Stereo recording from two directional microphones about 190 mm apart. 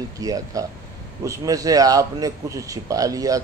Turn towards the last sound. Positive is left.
turn(degrees=-20)  # may be behind; listen again after turning